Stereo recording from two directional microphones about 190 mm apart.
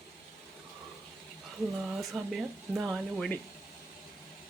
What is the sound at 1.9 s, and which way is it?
Speech, centre (ahead or behind).